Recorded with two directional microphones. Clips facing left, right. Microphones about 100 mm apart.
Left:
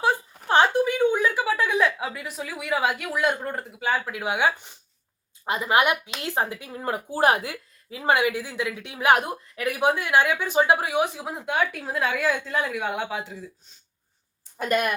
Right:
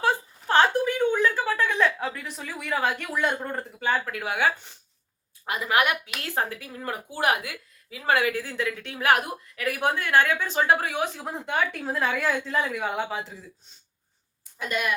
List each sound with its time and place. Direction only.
0.0 s a sound: 15° left (ahead or behind)
5.5 s speech: 25° left (ahead or behind)
8.1 s a woman's voice: 15° left (ahead or behind); by 13.7 s centre (ahead or behind)
14.6 s speech: 50° left (ahead or behind)